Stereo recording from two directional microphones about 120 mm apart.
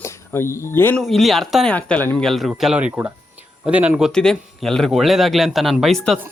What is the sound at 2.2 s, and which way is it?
Speech, centre (ahead or behind).